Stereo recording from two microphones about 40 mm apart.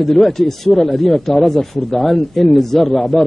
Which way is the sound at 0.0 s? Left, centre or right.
Centre.